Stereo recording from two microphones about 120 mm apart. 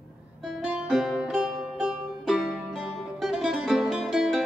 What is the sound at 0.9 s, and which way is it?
Music, centre (ahead or behind).